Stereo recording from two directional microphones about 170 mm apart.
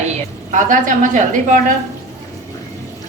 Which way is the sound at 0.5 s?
50° right (ahead or behind).